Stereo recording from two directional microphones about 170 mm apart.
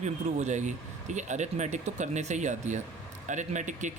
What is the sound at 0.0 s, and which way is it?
Speech, 40° right (ahead or behind).